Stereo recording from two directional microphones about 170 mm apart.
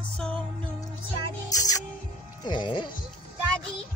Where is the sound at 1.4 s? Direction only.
20° left (ahead or behind).